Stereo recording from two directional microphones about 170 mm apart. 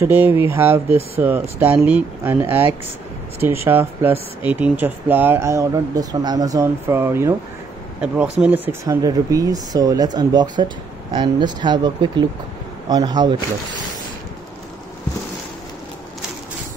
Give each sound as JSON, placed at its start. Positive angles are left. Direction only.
{"t": 0.0, "sound": "speech", "side_deg": -10}
{"t": 3.6, "sound": "speech", "side_deg": -10}
{"t": 8.8, "sound": "speech", "side_deg": -20}